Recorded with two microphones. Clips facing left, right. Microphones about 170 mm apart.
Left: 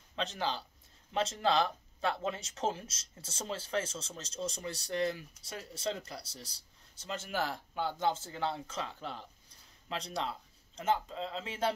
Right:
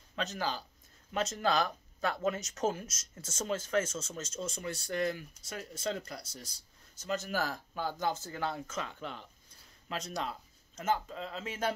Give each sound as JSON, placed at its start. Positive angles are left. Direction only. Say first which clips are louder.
{"t": 0.1, "sound": "speech", "louder": "even", "side_deg": 25}